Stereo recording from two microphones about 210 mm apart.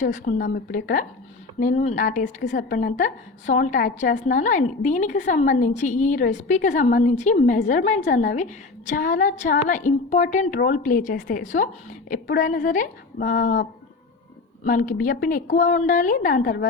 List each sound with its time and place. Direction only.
0.0 s a woman's voice: 40° left (ahead or behind)